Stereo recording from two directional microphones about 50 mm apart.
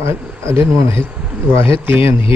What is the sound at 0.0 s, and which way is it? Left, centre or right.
Speech, right.